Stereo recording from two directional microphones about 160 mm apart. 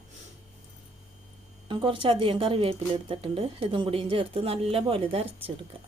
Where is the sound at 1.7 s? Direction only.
30° right (ahead or behind).